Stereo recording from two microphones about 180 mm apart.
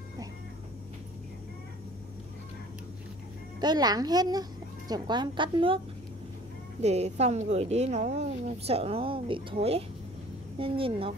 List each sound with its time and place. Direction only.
3.6 s a child's voice: 20° right (ahead or behind)
6.8 s speech: 35° right (ahead or behind)